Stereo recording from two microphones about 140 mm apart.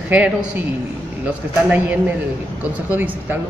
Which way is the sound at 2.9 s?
15° right (ahead or behind).